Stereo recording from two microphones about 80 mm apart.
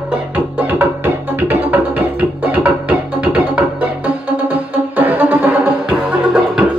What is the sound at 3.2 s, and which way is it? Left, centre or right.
Music, centre.